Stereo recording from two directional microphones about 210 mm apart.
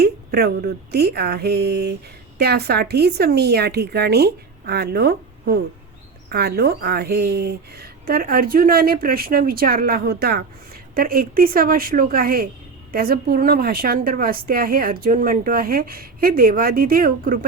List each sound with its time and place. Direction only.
0.0 s speech: 50° right (ahead or behind)